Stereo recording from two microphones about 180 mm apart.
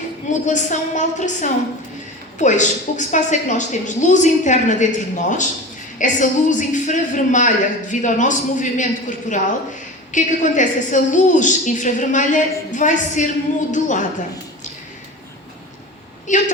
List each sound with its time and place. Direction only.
0.4 s a woman's voice: 45° left (ahead or behind)